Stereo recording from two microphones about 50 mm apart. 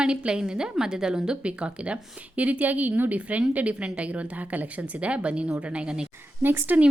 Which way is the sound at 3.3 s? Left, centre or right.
Right.